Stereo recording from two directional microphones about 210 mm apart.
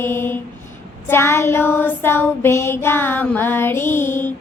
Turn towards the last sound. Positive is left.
turn(degrees=10)  # may be behind; listen again after turning